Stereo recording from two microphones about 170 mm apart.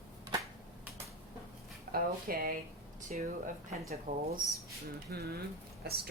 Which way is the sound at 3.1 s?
50° right (ahead or behind).